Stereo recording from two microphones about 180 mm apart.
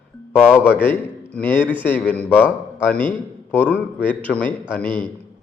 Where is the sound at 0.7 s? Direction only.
10° left (ahead or behind).